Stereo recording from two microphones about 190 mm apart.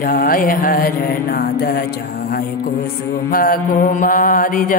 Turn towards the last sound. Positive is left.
turn(degrees=45)  # may be behind; listen again after turning